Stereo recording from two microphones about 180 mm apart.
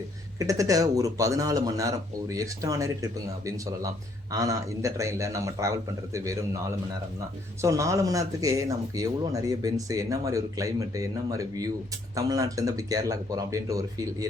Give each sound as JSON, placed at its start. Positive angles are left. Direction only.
{"t": 0.3, "sound": "a man's voice", "side_deg": -20}
{"t": 7.6, "sound": "speech", "side_deg": -15}